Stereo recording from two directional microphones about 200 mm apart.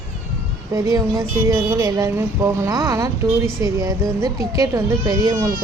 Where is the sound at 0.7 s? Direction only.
15° right (ahead or behind).